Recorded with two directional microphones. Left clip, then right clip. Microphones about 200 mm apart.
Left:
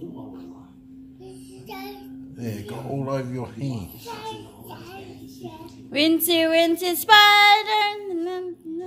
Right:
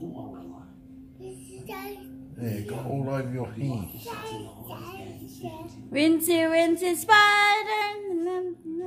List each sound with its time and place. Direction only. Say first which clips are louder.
1.7 s child singing: left 1 dB; 10° right (ahead or behind)
2.4 s speech: left 1 dB; 25° left (ahead or behind)
5.9 s child singing: left 2 dB; centre (ahead or behind)